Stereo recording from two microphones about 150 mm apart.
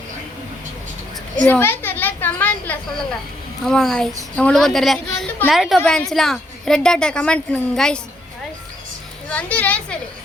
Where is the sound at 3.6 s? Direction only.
Centre (ahead or behind).